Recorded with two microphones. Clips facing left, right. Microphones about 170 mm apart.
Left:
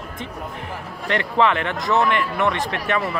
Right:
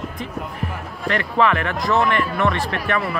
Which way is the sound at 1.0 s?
25° left (ahead or behind).